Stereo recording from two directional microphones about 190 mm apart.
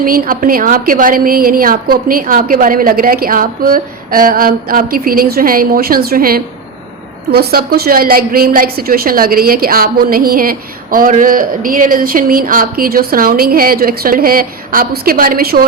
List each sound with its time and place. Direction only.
0.0 s a woman's voice: 50° right (ahead or behind)